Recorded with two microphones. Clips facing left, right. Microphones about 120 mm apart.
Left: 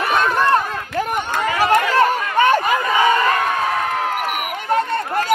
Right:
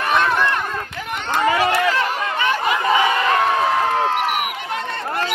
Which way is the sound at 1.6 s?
45° left (ahead or behind).